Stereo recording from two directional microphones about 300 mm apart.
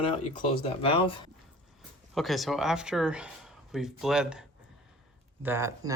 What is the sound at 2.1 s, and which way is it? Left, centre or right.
Speech, centre.